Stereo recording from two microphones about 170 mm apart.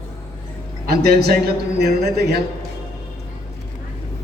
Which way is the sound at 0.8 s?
65° right (ahead or behind).